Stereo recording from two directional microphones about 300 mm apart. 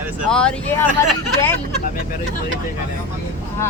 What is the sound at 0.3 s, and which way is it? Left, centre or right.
Speech, centre.